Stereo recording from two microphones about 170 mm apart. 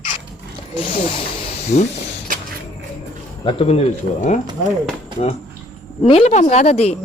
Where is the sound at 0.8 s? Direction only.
30° left (ahead or behind).